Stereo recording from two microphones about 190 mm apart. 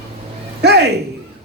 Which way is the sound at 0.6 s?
60° right (ahead or behind).